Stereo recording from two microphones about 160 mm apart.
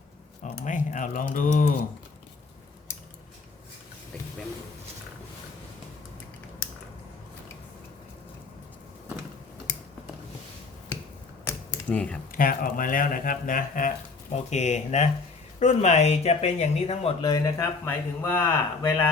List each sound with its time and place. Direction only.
0.4 s speech: 50° left (ahead or behind)
11.4 s typewriter: 10° left (ahead or behind)
12.3 s speech: 60° left (ahead or behind)
14.5 s speech: 45° left (ahead or behind)
17.2 s speech: 25° left (ahead or behind)